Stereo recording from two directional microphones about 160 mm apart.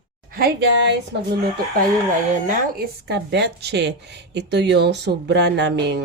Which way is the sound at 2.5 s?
70° right (ahead or behind).